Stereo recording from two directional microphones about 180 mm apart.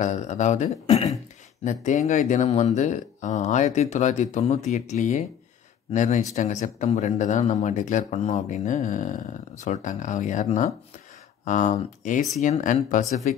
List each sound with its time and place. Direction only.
0.0 s speech: 40° left (ahead or behind)